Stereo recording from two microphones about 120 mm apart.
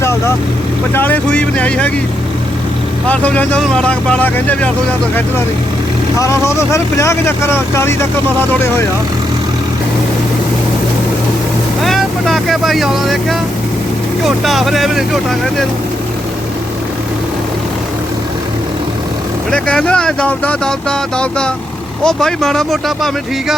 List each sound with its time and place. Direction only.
0.0 s vehicle: 25° left (ahead or behind)
0.9 s speech: 15° left (ahead or behind)
3.1 s speech: 10° left (ahead or behind)
6.1 s speech: 25° left (ahead or behind)
11.8 s speech: centre (ahead or behind)
19.5 s speech: 5° left (ahead or behind)